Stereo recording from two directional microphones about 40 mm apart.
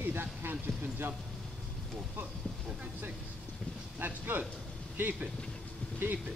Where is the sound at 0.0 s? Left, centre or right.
Right.